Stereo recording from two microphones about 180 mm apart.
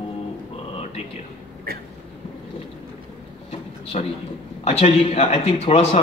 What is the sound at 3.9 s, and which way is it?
A man's voice, 40° left (ahead or behind).